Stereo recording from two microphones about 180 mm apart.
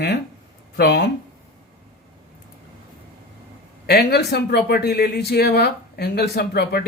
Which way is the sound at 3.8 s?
65° left (ahead or behind).